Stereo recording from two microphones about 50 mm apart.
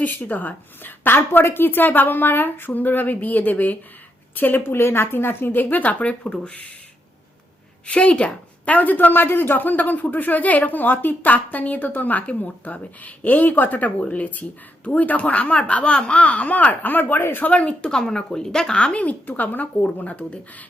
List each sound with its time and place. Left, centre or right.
0.0 s a woman's voice: left
7.9 s a woman's voice: left
17.9 s speech: centre
19.2 s a woman's voice: left